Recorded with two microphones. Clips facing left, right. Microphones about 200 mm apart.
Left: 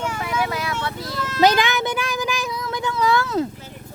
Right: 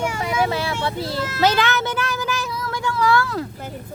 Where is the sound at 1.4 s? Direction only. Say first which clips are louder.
Left 2 dB; 15° left (ahead or behind).